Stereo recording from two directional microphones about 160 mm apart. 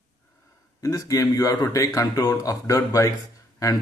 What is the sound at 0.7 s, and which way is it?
A man's voice, 20° left (ahead or behind).